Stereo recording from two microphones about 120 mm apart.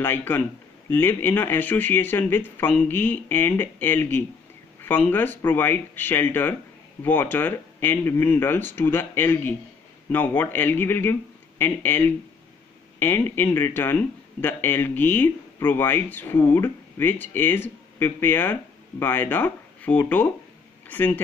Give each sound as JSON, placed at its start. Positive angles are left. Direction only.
{"t": 0.0, "sound": "speech", "side_deg": 20}